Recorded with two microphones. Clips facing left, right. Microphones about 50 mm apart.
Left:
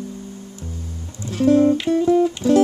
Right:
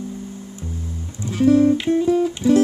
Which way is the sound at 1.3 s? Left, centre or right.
Centre.